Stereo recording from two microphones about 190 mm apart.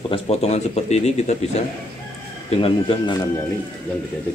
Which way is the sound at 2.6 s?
25° left (ahead or behind).